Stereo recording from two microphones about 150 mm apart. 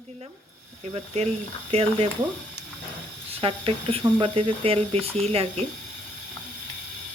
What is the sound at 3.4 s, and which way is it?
Speech, 40° right (ahead or behind).